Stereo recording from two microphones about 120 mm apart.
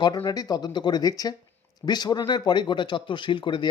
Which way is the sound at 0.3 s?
30° left (ahead or behind).